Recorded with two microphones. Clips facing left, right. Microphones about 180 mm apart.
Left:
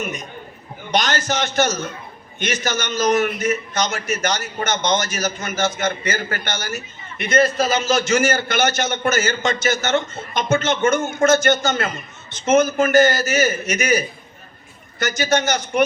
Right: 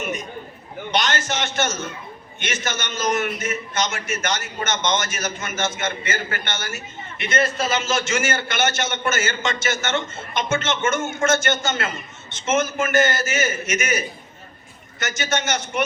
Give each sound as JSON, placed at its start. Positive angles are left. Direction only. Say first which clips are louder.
{"t": 0.9, "sound": "a man's voice", "louder": "left 3 dB", "side_deg": 40}